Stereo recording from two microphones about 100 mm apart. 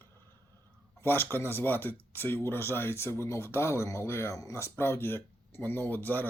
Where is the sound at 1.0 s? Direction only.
20° left (ahead or behind).